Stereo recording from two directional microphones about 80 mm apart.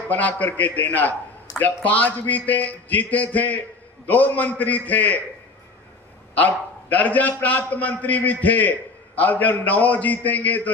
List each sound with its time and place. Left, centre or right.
0.1 s a man's voice: centre
6.9 s a man's voice: left